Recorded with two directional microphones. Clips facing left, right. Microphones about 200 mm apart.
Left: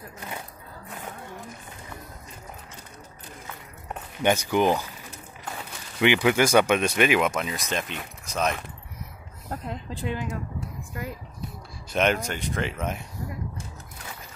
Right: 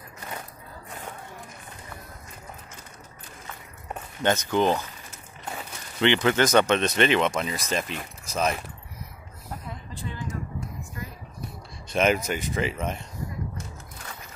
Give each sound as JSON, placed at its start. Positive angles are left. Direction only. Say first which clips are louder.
{"t": 4.2, "sound": "speech", "louder": "left 1 dB", "side_deg": 15}
{"t": 5.9, "sound": "speech", "louder": "left 1 dB", "side_deg": 10}
{"t": 9.5, "sound": "speech", "louder": "left 5 dB", "side_deg": 90}
{"t": 11.9, "sound": "speech", "louder": "right 1 dB", "side_deg": 0}